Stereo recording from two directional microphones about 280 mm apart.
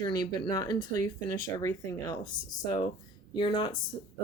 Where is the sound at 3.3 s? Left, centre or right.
Centre.